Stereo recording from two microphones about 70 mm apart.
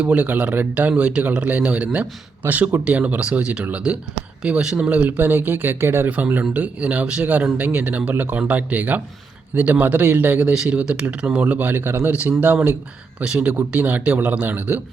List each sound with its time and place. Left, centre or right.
0.0 s speech: centre
10.5 s speech: centre; by 14.8 s right